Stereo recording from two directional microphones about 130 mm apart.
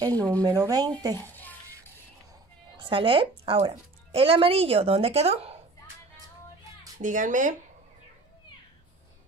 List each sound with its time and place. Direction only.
0.0 s speech: 30° right (ahead or behind)
1.1 s music: 15° left (ahead or behind)
2.8 s speech: 40° right (ahead or behind)
7.0 s speech: 80° right